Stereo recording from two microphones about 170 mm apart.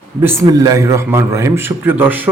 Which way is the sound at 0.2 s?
15° right (ahead or behind).